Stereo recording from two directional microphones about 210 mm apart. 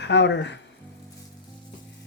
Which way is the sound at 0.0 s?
55° left (ahead or behind).